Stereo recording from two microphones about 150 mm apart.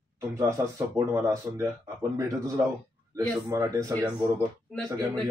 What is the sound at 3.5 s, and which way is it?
Speech, 20° right (ahead or behind).